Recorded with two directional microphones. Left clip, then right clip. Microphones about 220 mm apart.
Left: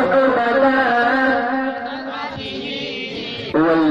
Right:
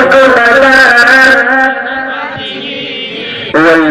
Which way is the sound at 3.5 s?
25° right (ahead or behind).